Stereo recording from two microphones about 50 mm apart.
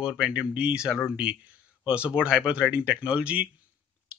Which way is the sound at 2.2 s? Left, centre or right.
Centre.